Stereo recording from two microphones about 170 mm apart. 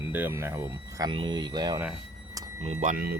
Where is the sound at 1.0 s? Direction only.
25° right (ahead or behind).